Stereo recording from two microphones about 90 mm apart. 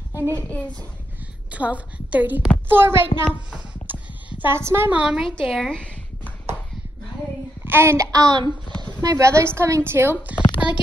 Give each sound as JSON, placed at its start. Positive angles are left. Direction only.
{"t": 0.3, "sound": "a child's voice", "side_deg": 15}
{"t": 1.5, "sound": "a woman's voice", "side_deg": -15}
{"t": 3.4, "sound": "a sound", "side_deg": -20}
{"t": 4.9, "sound": "a woman's voice", "side_deg": -10}
{"t": 5.5, "sound": "a sound", "side_deg": 5}
{"t": 7.6, "sound": "child singing", "side_deg": -25}
{"t": 8.1, "sound": "speech", "side_deg": -50}
{"t": 9.0, "sound": "a woman's voice", "side_deg": -35}